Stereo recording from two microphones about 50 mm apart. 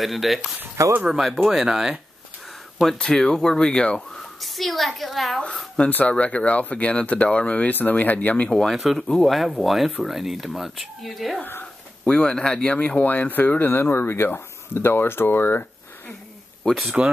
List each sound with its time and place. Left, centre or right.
0.0 s speech: centre
0.8 s speech: right
1.2 s speech: centre
3.0 s speech: centre
4.2 s speech: centre
5.9 s speech: left
7.7 s speech: left
8.5 s speech: centre
12.0 s speech: centre
12.6 s speech: left
16.6 s speech: centre